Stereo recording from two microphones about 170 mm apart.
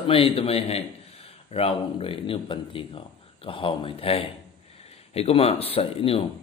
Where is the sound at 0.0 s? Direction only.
35° left (ahead or behind).